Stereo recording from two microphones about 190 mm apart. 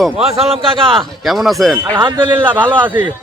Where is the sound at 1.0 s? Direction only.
Centre (ahead or behind).